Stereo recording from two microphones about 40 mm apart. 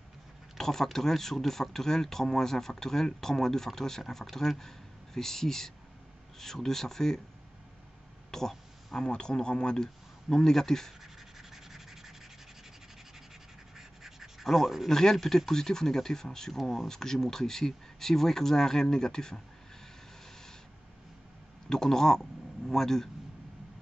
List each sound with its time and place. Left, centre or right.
0.6 s a sound: centre
0.9 s speech: centre
8.3 s a sound: centre
9.0 s speech: left
11.5 s rub: centre
13.7 s scratch: centre
14.9 s speech: centre
21.6 s speech: centre